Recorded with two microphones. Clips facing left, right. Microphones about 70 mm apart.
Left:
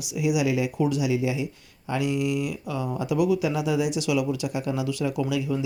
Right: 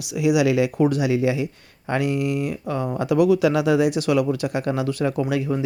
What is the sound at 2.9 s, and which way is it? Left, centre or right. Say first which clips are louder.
Speech: right 5 dB; right.